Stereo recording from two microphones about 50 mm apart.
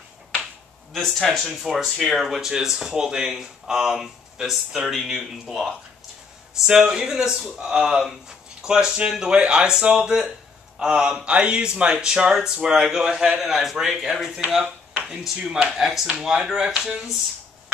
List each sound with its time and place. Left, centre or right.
0.9 s speech: centre